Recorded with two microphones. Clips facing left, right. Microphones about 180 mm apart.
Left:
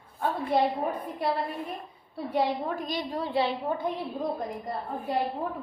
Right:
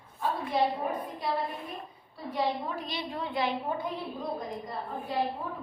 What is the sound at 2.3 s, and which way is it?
A woman's voice, 45° left (ahead or behind).